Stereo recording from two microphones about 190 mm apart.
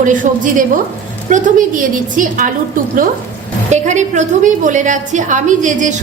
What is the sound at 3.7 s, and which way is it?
A woman's voice, 40° right (ahead or behind).